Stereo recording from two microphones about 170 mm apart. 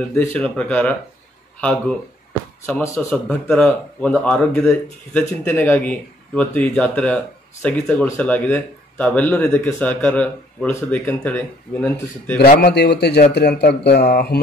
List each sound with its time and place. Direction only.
0.1 s speech: 15° left (ahead or behind)
3.4 s speech: 5° left (ahead or behind)
12.4 s speech: 65° left (ahead or behind)